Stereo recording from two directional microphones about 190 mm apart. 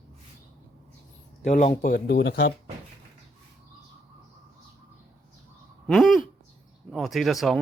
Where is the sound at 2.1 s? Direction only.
65° left (ahead or behind).